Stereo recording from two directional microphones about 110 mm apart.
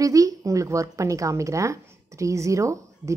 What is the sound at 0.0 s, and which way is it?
A woman's voice, 30° right (ahead or behind).